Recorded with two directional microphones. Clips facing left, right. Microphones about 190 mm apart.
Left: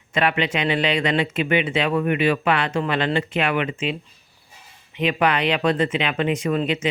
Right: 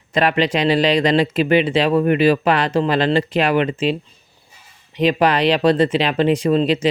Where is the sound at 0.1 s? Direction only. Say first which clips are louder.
Right 4 dB; 35° right (ahead or behind).